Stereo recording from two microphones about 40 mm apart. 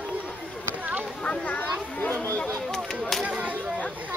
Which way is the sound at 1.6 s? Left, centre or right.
Left.